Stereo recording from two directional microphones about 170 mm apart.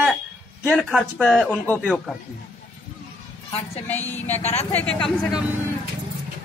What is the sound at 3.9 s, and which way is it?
Speech, 10° left (ahead or behind).